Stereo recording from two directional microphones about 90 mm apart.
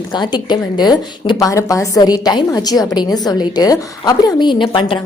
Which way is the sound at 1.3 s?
35° left (ahead or behind).